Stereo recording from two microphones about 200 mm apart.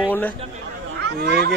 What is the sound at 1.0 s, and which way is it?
Speech, 55° right (ahead or behind).